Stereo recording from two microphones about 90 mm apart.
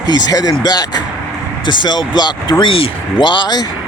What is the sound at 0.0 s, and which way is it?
Speech, 45° left (ahead or behind).